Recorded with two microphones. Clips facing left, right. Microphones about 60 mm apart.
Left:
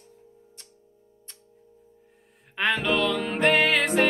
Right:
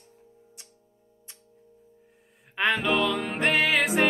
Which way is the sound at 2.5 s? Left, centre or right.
Centre.